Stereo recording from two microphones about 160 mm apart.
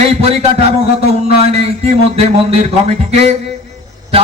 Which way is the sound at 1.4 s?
40° right (ahead or behind).